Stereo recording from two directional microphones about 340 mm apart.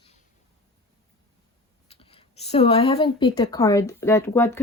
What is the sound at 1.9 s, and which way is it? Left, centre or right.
Speech, centre.